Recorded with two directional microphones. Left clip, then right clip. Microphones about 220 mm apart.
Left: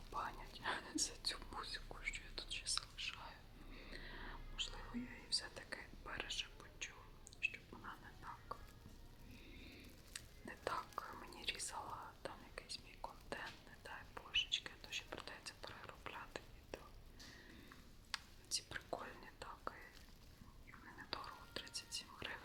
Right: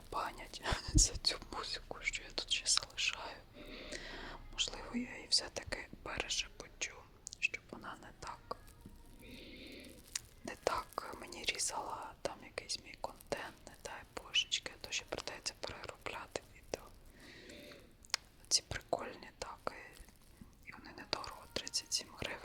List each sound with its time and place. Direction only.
0.1 s whispering: 30° right (ahead or behind)
3.7 s whispering: 20° right (ahead or behind)